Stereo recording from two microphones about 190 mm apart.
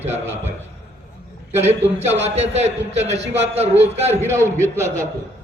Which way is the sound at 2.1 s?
35° right (ahead or behind).